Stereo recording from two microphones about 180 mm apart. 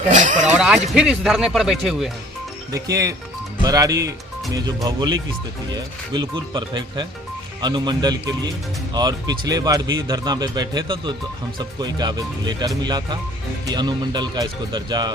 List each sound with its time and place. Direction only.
0.1 s speech: 40° right (ahead or behind)
0.9 s speech: 5° right (ahead or behind)
2.7 s speech: 20° right (ahead or behind)